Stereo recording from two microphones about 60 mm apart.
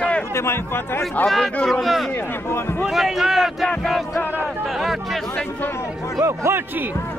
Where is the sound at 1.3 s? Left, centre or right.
Centre.